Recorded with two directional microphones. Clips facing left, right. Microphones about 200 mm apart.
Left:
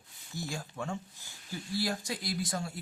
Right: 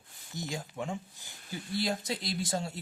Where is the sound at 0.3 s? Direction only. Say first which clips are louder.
Right 1 dB; 20° right (ahead or behind).